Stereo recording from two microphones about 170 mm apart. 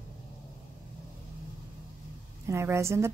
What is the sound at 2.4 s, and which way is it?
Speech, 15° right (ahead or behind).